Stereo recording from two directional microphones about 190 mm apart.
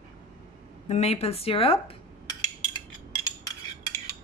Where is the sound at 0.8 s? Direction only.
35° left (ahead or behind).